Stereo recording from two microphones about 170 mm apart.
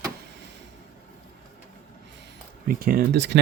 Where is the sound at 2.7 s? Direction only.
60° right (ahead or behind); by 3.4 s 85° right.